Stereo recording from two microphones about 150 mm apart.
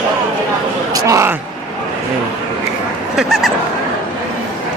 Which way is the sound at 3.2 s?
Centre (ahead or behind).